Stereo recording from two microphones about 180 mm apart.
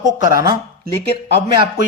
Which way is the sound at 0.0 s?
20° right (ahead or behind).